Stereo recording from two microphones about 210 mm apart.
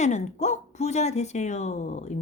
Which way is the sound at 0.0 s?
35° left (ahead or behind).